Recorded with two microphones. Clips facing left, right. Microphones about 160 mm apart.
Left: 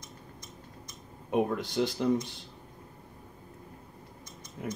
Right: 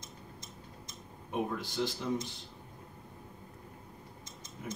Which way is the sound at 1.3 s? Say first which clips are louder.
Left 7 dB; 70° left (ahead or behind).